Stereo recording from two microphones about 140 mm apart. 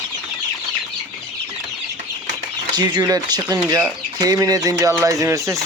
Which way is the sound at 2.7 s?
30° right (ahead or behind).